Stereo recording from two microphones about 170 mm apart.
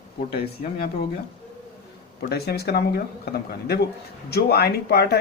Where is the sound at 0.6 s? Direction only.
65° left (ahead or behind).